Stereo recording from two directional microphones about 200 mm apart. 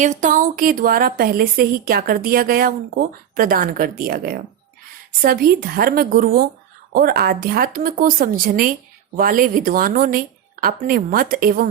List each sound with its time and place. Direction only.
0.0 s a woman's voice: 40° right (ahead or behind)